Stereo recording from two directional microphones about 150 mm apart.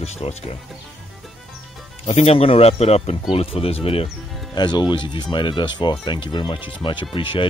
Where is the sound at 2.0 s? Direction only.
45° left (ahead or behind).